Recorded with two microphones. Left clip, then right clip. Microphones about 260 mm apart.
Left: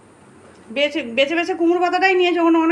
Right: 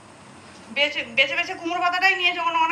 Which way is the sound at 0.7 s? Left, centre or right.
Left.